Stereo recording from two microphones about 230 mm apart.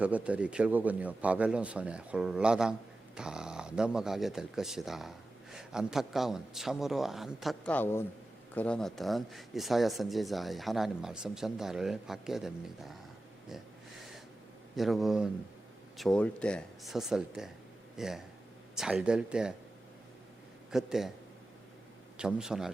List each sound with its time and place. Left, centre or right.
0.0 s speech: centre
14.8 s speech: centre
20.7 s a man's voice: centre
22.2 s speech: centre